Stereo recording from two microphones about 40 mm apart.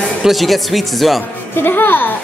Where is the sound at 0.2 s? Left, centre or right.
Centre.